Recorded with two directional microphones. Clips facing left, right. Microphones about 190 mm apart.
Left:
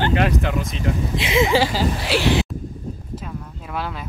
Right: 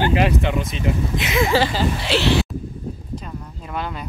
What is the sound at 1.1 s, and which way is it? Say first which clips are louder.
Speech: left 5 dB; 30° left (ahead or behind).